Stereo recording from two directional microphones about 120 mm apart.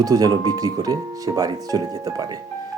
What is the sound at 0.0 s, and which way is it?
Speech, 30° right (ahead or behind).